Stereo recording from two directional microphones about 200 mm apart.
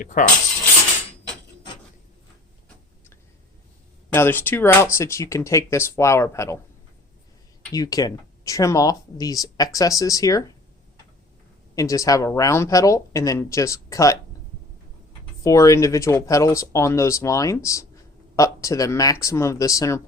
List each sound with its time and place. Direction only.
0.0 s coin: 40° left (ahead or behind)
4.1 s speech: 10° left (ahead or behind)
7.7 s speech: 20° left (ahead or behind)
11.7 s speech: 15° left (ahead or behind)
15.4 s speech: 15° left (ahead or behind)